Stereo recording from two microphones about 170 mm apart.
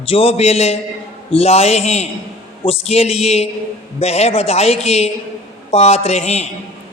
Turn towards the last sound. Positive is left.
turn(degrees=40)  # may be behind; listen again after turning